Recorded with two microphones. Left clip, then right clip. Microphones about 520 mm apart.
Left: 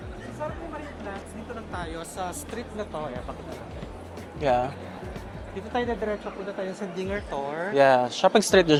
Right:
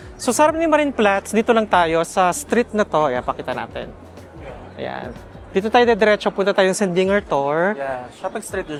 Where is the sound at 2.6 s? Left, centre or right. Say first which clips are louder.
Right 16 dB; right.